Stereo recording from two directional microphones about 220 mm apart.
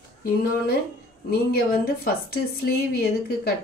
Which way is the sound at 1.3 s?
45° left (ahead or behind).